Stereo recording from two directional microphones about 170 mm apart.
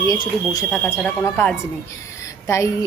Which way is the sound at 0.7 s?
10° left (ahead or behind).